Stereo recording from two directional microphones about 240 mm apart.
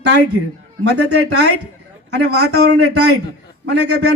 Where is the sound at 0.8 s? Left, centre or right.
Right.